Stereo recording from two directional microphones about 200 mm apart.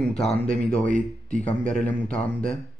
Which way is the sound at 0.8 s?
40° right (ahead or behind).